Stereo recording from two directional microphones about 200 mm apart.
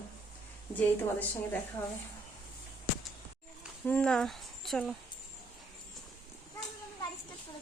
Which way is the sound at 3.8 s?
5° left (ahead or behind).